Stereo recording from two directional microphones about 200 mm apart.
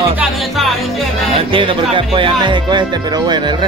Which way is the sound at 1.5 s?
25° right (ahead or behind).